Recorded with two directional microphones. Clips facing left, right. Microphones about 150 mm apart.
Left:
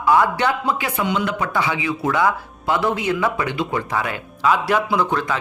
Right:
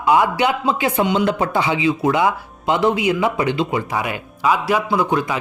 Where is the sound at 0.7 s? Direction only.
25° right (ahead or behind).